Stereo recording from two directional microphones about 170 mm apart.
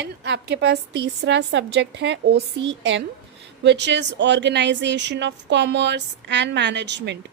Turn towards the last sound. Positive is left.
turn(degrees=-90)